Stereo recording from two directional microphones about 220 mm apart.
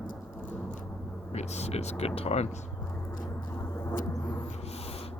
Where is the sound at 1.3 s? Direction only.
30° left (ahead or behind).